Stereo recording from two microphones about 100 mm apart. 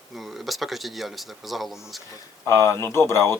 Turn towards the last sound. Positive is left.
turn(degrees=25)  # may be behind; listen again after turning